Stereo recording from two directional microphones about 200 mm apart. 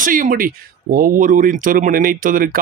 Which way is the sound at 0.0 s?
45° right (ahead or behind).